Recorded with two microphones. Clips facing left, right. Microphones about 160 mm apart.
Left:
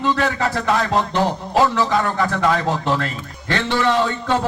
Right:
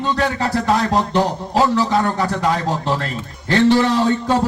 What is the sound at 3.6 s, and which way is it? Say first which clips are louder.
Speech: right 5 dB; 40° right (ahead or behind).